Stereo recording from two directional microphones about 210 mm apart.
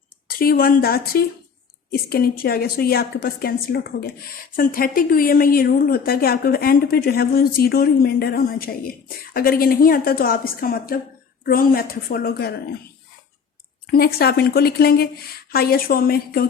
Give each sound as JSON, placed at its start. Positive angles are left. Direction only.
{"t": 0.3, "sound": "a woman's voice", "side_deg": 45}
{"t": 13.9, "sound": "a woman's voice", "side_deg": 45}